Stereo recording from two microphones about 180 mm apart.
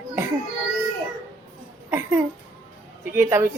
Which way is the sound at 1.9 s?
10° right (ahead or behind).